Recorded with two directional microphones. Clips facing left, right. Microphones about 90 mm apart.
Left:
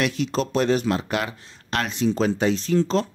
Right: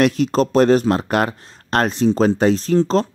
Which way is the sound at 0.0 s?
45° right (ahead or behind).